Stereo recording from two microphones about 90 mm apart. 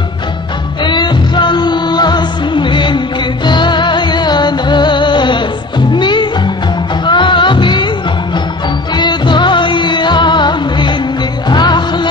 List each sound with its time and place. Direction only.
0.8 s music: 55° left (ahead or behind)
8.9 s music: 60° left (ahead or behind)